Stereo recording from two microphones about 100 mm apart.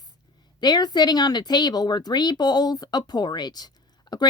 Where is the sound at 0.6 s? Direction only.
45° left (ahead or behind).